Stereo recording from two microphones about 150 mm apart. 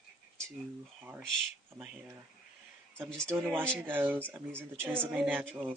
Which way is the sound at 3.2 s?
5° left (ahead or behind).